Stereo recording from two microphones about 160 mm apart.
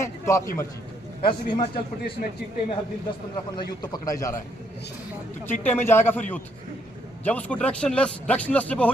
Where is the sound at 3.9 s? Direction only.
20° left (ahead or behind).